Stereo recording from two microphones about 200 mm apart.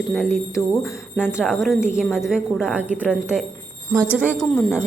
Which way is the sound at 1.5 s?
Centre (ahead or behind).